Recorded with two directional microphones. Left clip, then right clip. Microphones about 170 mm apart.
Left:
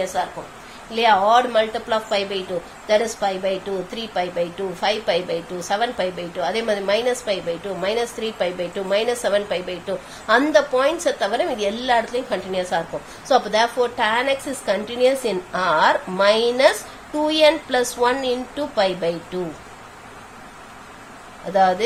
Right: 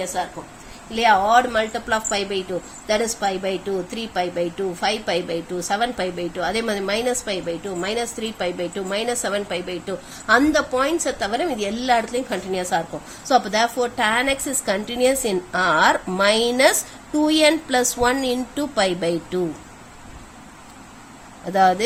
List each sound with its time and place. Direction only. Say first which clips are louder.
0.0 s a woman's voice: left 2 dB; 30° right (ahead or behind)
21.5 s a woman's voice: even; 30° right (ahead or behind)